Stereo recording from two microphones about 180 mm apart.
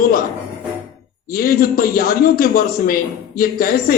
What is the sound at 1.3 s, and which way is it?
Speech, 50° left (ahead or behind).